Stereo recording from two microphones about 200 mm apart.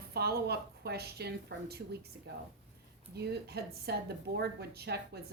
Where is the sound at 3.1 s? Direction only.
55° right (ahead or behind).